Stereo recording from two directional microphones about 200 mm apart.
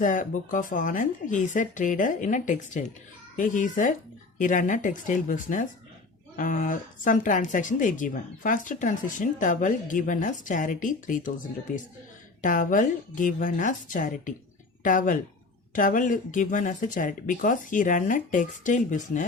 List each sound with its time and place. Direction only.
0.0 s speech: 40° left (ahead or behind)
12.4 s speech: 40° left (ahead or behind)